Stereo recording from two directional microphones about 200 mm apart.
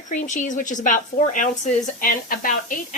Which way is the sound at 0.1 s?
35° left (ahead or behind).